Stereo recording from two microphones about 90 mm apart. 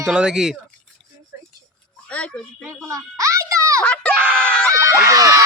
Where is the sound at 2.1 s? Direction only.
15° left (ahead or behind).